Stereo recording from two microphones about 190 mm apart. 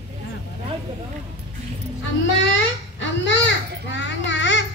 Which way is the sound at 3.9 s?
70° left (ahead or behind).